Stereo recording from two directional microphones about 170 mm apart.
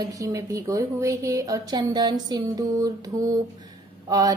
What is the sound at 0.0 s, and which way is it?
A woman's voice, 20° right (ahead or behind).